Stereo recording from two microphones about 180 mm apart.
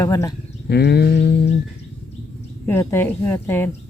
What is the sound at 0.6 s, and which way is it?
Speech, 65° left (ahead or behind).